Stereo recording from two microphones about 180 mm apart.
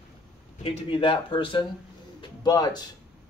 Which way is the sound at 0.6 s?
30° left (ahead or behind).